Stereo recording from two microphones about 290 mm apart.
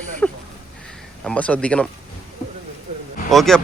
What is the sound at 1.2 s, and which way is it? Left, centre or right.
Speech, centre.